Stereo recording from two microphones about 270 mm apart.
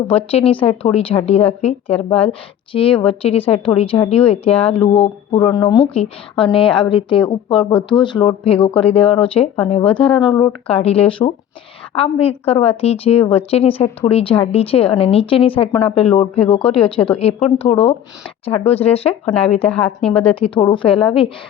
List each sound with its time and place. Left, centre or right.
0.1 s speech: left
12.5 s speech: left
16.8 s a woman's voice: centre
17.2 s speech: left
19.6 s a woman's voice: centre
20.7 s speech: left